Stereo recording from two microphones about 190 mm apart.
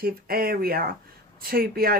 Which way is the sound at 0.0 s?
50° right (ahead or behind).